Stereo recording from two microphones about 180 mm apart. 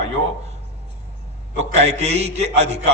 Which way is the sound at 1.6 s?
35° right (ahead or behind).